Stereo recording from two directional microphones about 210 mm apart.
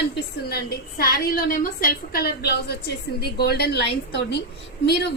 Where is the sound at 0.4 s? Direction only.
45° left (ahead or behind).